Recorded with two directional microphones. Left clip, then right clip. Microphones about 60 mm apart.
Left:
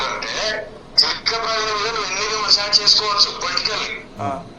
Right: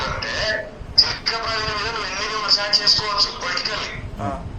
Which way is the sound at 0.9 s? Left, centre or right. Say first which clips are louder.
Left 1 dB; left.